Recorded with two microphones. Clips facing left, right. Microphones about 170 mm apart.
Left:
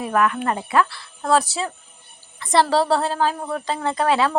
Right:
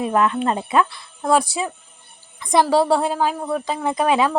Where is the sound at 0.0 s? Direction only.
25° right (ahead or behind).